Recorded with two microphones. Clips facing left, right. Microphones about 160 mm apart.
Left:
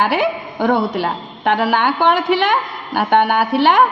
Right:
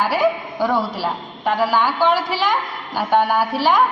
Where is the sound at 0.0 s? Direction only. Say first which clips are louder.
Left 1 dB; 65° left (ahead or behind).